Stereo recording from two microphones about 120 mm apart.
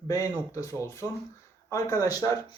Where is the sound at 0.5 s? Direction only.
25° left (ahead or behind).